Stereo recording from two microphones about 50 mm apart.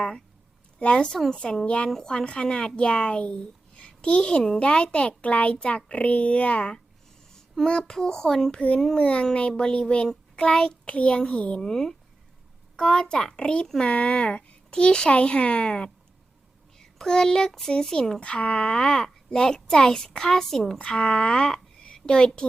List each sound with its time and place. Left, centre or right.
0.8 s a child's voice: centre
1.9 s a child's voice: centre
11.6 s a child's voice: centre
13.9 s a child's voice: left
16.7 s speech: centre
18.2 s a child's voice: left
20.7 s speech: centre